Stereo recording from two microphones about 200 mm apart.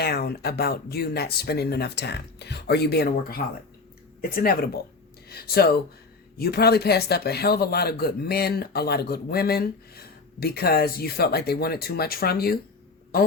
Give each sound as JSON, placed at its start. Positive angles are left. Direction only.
{"t": 0.0, "sound": "speech", "side_deg": 50}